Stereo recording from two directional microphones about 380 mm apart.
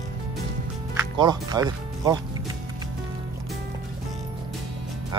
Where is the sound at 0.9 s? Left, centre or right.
Centre.